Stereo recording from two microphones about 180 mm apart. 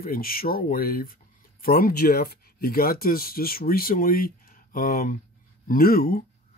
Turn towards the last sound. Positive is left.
turn(degrees=55)  # may be behind; listen again after turning